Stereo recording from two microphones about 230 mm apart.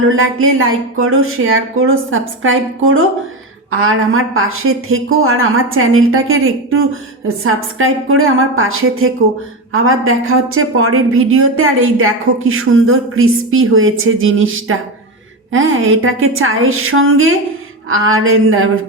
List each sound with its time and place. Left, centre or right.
0.1 s a woman's voice: right